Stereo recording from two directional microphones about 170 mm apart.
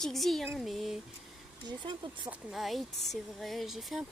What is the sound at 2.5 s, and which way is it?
Speech, centre (ahead or behind).